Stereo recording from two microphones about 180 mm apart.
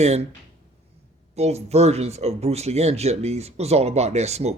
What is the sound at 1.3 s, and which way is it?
A man's voice, 35° right (ahead or behind).